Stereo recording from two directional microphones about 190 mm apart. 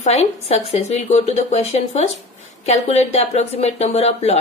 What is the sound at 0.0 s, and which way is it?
A woman's voice, 35° left (ahead or behind).